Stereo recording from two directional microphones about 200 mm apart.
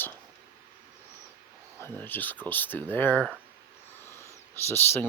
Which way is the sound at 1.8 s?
10° left (ahead or behind).